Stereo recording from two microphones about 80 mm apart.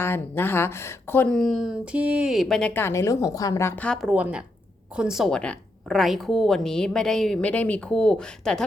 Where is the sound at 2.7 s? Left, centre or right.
Left.